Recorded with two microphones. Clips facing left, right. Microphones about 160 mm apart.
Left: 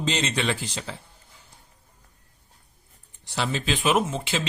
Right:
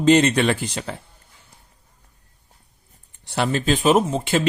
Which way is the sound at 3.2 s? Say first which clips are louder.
Right 6 dB; 55° right (ahead or behind).